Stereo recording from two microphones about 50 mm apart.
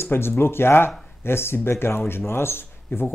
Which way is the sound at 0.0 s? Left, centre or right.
Left.